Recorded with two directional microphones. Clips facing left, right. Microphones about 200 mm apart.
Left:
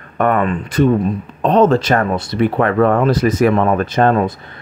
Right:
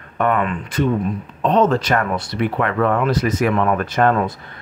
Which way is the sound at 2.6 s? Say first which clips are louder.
Left 5 dB; 40° left (ahead or behind).